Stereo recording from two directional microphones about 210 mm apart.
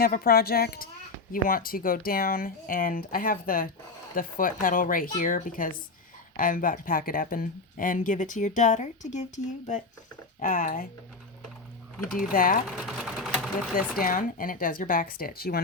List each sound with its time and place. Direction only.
0.0 s speech: 45° left (ahead or behind)
12.3 s speech: 40° left (ahead or behind)
12.6 s sewing machine: centre (ahead or behind)
14.0 s speech: 40° left (ahead or behind)